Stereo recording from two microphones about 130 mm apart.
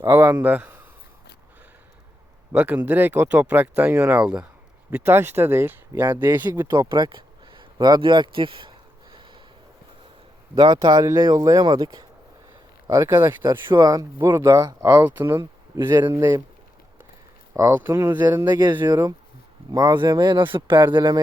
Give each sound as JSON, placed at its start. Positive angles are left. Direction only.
{"t": 0.0, "sound": "speech", "side_deg": -15}
{"t": 2.5, "sound": "speech", "side_deg": -15}
{"t": 6.7, "sound": "a sound", "side_deg": -35}
{"t": 10.5, "sound": "speech", "side_deg": -30}
{"t": 12.9, "sound": "speech", "side_deg": -20}
{"t": 13.4, "sound": "speech", "side_deg": -35}
{"t": 17.6, "sound": "speech", "side_deg": -25}
{"t": 18.8, "sound": "speech", "side_deg": -30}